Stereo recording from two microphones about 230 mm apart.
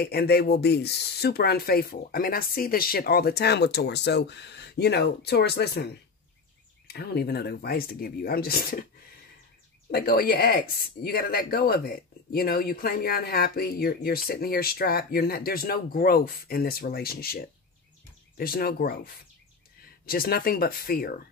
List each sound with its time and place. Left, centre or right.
0.0 s speech: left
9.8 s speech: left